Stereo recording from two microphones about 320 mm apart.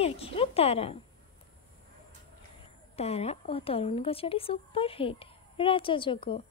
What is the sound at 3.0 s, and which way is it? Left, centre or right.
Speech, centre.